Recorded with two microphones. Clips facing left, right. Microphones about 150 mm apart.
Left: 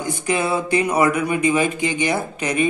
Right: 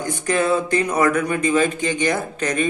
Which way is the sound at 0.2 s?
15° left (ahead or behind).